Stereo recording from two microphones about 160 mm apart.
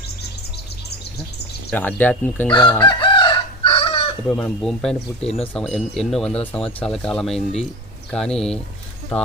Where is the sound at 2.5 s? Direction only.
30° left (ahead or behind).